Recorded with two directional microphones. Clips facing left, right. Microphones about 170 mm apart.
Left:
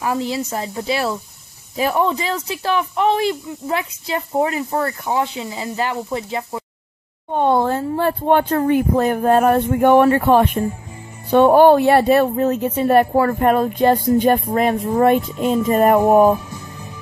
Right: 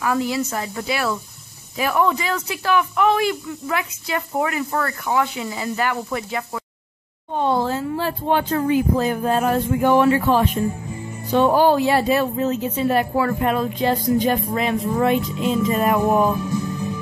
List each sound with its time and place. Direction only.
0.0 s speech: 25° left (ahead or behind)
7.3 s a woman's voice: 55° left (ahead or behind)